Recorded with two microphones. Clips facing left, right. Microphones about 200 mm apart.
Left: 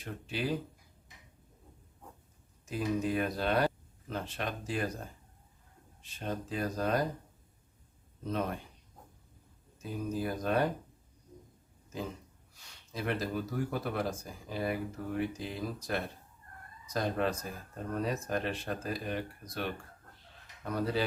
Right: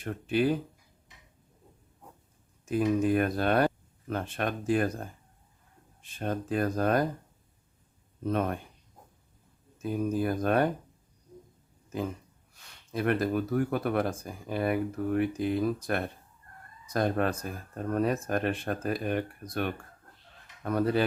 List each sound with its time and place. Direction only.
0.0 s speech: 55° right (ahead or behind)
2.6 s speech: 55° right (ahead or behind)
8.2 s speech: 55° right (ahead or behind)
9.8 s speech: 55° right (ahead or behind)
12.9 s speech: 55° right (ahead or behind)